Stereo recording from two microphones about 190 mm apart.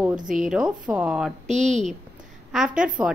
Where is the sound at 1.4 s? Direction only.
40° right (ahead or behind).